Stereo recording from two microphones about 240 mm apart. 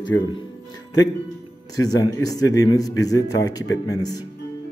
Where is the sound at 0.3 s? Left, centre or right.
Centre.